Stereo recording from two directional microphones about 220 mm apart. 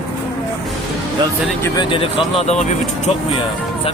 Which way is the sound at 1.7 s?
25° left (ahead or behind).